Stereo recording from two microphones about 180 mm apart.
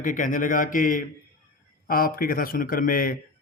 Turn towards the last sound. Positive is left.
turn(degrees=50)  # may be behind; listen again after turning